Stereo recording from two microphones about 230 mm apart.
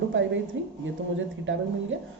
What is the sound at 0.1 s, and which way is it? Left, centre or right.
Speech, right.